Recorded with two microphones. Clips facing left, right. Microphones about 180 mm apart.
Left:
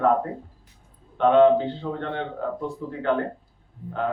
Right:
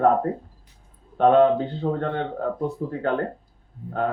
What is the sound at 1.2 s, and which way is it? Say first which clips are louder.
A man's voice: even; 40° right (ahead or behind).